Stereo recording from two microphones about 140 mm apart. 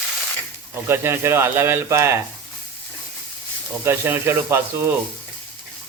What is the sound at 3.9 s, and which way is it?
Speech, 15° right (ahead or behind).